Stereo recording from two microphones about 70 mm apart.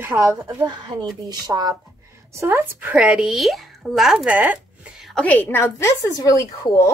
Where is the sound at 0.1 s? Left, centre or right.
Right.